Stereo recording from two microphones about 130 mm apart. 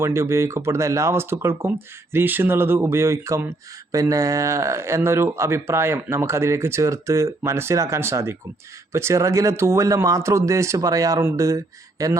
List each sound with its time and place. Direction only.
0.0 s speech: 20° right (ahead or behind)